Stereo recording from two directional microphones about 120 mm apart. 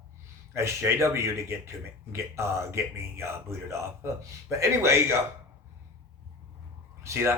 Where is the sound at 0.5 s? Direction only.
20° right (ahead or behind).